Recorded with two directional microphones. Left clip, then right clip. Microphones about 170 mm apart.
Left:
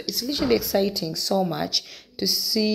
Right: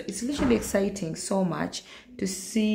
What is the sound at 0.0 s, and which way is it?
Speech, 10° left (ahead or behind).